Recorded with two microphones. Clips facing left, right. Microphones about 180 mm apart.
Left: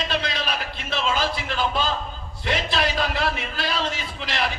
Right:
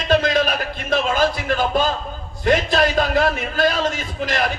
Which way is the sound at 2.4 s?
45° right (ahead or behind).